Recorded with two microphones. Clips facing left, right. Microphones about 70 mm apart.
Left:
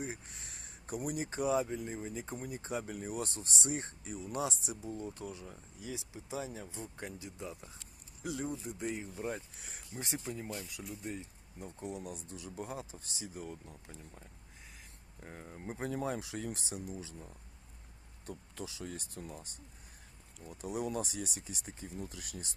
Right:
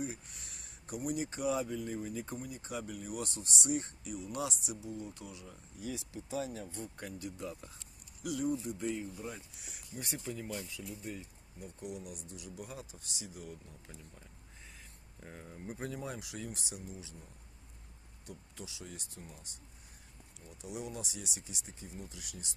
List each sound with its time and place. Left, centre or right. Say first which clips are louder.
0.0 s a sound: right 1 dB; left
0.9 s speech: even; left
2.4 s speech: left 2 dB; left
5.8 s speech: right 3 dB; centre
15.2 s speech: left 1 dB; left
16.0 s speech: left 5 dB; left
18.3 s speech: left 4 dB; left
20.5 s speech: left 6 dB; left